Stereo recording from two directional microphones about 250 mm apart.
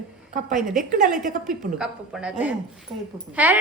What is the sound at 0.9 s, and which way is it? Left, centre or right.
Speech, right.